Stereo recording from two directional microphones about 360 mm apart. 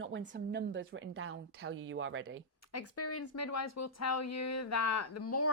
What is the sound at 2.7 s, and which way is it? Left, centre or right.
Speech, left.